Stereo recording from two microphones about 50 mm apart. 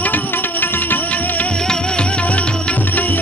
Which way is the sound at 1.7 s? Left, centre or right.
Centre.